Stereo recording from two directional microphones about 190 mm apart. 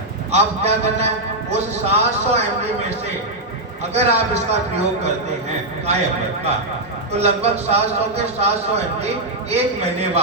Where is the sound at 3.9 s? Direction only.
35° right (ahead or behind).